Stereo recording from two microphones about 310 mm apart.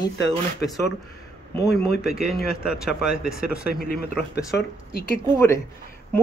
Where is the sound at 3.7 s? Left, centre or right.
Left.